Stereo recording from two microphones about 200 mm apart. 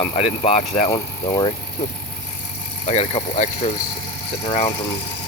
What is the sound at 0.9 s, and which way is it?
Speech, 20° left (ahead or behind).